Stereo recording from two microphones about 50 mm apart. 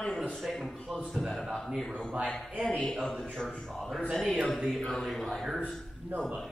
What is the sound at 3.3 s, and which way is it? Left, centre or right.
A man's voice, centre.